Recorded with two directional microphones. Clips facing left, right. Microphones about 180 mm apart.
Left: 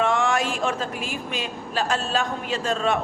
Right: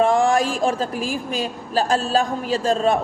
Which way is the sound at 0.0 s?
35° right (ahead or behind).